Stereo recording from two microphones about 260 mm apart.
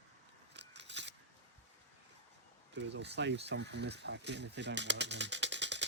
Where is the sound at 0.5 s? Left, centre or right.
Right.